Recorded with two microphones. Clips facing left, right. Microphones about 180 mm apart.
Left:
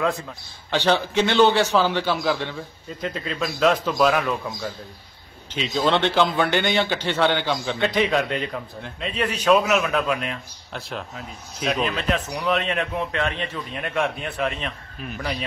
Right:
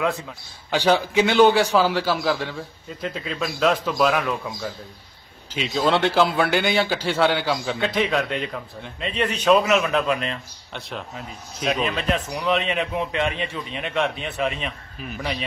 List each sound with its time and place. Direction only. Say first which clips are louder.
0.7 s a man's voice: right 1 dB; 10° right (ahead or behind)